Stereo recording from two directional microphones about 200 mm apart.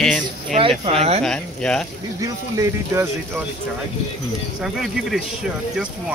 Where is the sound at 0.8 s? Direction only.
30° right (ahead or behind).